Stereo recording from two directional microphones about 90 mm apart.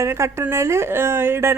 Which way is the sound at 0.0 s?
30° right (ahead or behind).